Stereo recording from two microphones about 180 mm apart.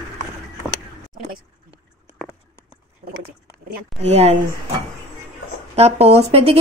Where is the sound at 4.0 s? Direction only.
35° right (ahead or behind).